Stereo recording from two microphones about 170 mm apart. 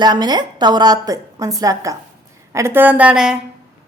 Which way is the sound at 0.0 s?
25° right (ahead or behind).